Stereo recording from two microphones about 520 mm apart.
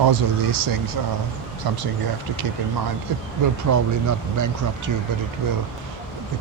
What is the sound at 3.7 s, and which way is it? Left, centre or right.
Speech, right.